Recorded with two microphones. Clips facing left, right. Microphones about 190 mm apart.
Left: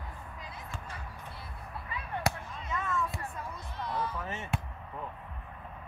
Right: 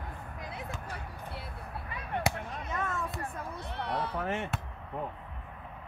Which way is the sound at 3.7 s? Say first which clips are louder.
Right 1 dB; 65° right (ahead or behind).